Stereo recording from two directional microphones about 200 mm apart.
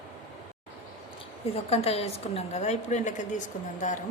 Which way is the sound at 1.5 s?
30° left (ahead or behind).